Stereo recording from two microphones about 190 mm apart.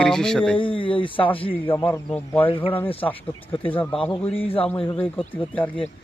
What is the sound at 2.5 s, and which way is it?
Speech, 25° left (ahead or behind).